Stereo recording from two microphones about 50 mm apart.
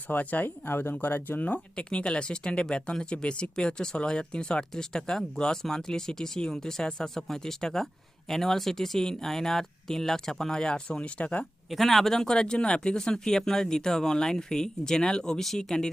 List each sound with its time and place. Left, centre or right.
0.1 s speech: left
1.7 s speech: left
11.7 s speech: centre